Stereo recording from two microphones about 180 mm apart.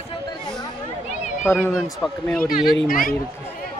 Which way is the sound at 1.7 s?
5° left (ahead or behind).